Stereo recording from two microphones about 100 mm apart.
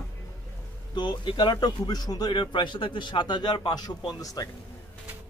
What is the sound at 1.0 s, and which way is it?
Speech, 50° left (ahead or behind).